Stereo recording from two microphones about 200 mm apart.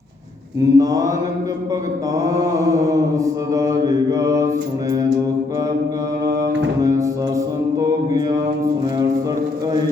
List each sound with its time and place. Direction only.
0.6 s mantra: 15° right (ahead or behind)
2.1 s mantra: 15° right (ahead or behind)
6.2 s mantra: 15° right (ahead or behind)